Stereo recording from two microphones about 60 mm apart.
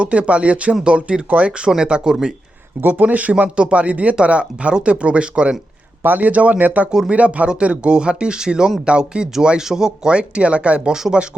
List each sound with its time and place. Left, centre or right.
0.0 s speech: right
2.8 s speech: right
6.0 s speech: right; by 11.3 s centre